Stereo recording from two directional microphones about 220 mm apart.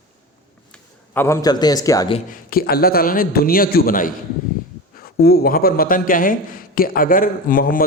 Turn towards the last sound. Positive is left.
turn(degrees=40)  # may be behind; listen again after turning